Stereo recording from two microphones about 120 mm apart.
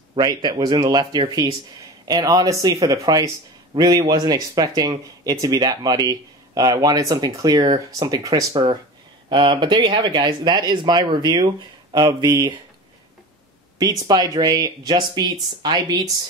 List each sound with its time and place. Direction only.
0.1 s speech: 35° right (ahead or behind)
13.7 s speech: 35° right (ahead or behind)